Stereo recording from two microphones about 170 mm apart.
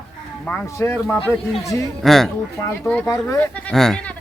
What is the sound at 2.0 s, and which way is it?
Speech, centre (ahead or behind).